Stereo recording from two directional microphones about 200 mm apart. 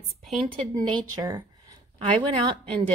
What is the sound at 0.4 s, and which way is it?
Speech, 25° right (ahead or behind).